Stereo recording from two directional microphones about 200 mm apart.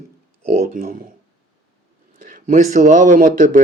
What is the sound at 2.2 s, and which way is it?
Speech, 40° right (ahead or behind).